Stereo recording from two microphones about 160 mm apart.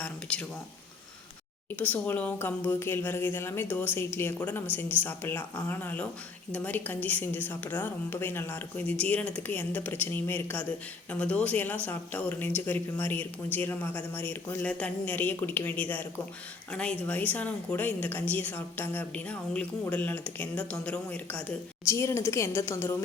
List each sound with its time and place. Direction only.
0.0 s speech: 5° left (ahead or behind)
1.7 s a woman's voice: 10° left (ahead or behind)